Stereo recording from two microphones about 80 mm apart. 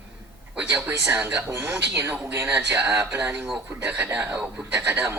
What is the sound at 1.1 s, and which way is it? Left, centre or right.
Speech, right.